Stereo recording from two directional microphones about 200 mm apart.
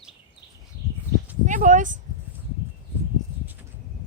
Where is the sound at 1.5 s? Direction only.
40° right (ahead or behind).